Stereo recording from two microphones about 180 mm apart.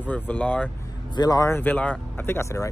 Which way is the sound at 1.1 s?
20° left (ahead or behind).